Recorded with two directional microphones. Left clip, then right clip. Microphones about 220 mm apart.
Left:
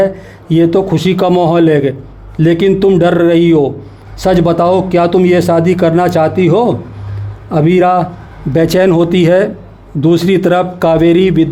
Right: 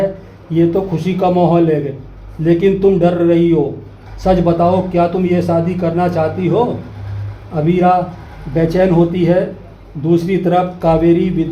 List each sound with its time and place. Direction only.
0.5 s speech: 50° left (ahead or behind)